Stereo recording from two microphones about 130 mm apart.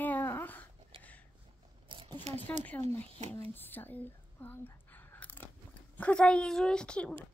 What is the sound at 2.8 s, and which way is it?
Speech, 50° right (ahead or behind).